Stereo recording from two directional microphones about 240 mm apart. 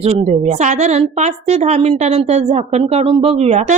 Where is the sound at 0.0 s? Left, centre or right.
Right.